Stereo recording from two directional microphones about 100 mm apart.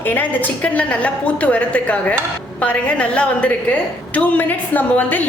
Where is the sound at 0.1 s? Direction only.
15° left (ahead or behind).